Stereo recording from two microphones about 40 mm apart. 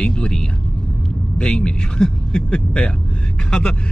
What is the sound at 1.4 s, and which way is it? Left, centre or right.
Speech, left.